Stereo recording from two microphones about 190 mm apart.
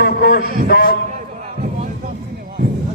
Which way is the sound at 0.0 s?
55° left (ahead or behind).